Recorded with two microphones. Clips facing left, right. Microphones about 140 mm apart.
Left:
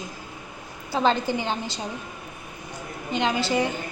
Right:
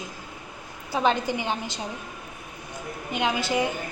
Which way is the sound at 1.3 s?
5° right (ahead or behind).